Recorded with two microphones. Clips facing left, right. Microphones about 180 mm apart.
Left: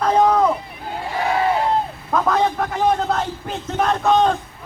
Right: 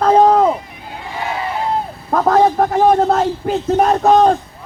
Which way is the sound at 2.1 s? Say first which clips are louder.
Right 6 dB; 40° right (ahead or behind).